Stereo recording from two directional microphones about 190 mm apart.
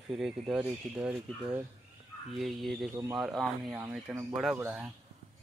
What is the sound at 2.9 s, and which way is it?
Speech, 15° right (ahead or behind).